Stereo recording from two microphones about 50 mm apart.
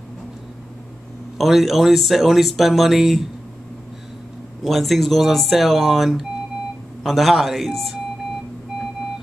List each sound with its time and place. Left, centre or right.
1.4 s speech: centre
4.6 s speech: centre